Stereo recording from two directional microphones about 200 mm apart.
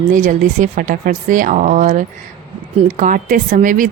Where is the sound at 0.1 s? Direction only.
40° right (ahead or behind).